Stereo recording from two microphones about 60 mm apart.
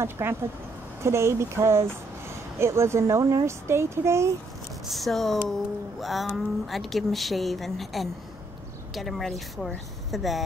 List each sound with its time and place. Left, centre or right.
0.0 s speech: right
4.8 s speech: centre